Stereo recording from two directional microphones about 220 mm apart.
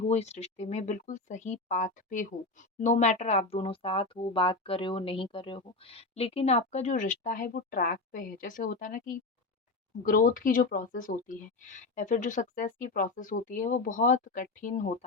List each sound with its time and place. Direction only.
0.1 s speech: 30° left (ahead or behind)